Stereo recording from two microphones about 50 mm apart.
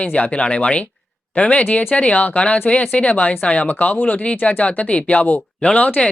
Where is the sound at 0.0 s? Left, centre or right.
Left.